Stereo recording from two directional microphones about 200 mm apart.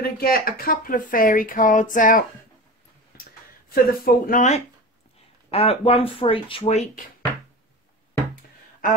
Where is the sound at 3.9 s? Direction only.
45° left (ahead or behind).